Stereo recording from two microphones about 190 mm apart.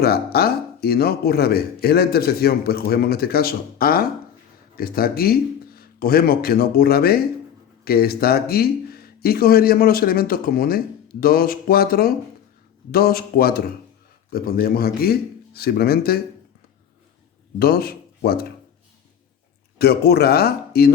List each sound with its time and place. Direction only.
0.0 s speech: 55° left (ahead or behind)
17.6 s speech: 55° left (ahead or behind)
19.8 s speech: 55° left (ahead or behind)